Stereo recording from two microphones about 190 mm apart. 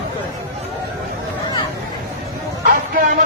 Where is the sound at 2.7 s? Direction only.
45° right (ahead or behind).